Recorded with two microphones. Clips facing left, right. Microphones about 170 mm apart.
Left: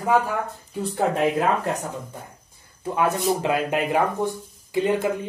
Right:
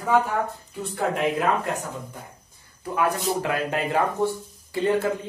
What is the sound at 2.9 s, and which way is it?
Speech, 20° left (ahead or behind).